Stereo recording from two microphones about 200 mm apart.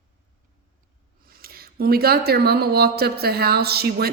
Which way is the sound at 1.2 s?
50° right (ahead or behind).